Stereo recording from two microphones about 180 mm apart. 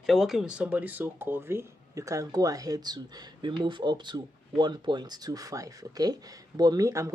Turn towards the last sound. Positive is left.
turn(degrees=-15)  # may be behind; listen again after turning